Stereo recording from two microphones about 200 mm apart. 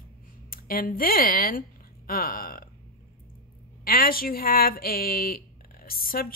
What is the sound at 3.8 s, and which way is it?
Speech, 45° left (ahead or behind).